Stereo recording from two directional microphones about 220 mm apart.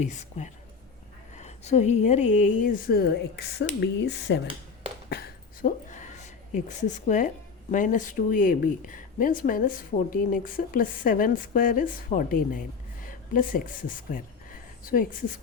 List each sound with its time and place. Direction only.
0.0 s speech: 30° left (ahead or behind); by 4.4 s 50° left (ahead or behind)
5.0 s a sound: 45° left (ahead or behind)
7.7 s speech: 35° left (ahead or behind)